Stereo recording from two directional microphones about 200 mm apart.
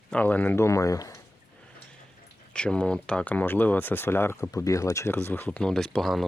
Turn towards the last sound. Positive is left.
turn(degrees=0)  # may be behind; listen again after turning